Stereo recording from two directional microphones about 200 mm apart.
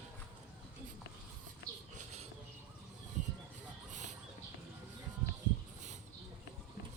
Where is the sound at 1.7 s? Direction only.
15° right (ahead or behind).